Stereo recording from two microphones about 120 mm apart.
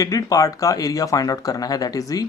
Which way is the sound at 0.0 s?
30° left (ahead or behind).